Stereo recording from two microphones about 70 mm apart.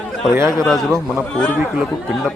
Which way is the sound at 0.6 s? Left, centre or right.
Centre.